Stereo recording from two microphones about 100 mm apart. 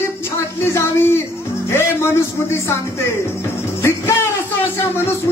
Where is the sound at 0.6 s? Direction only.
25° left (ahead or behind).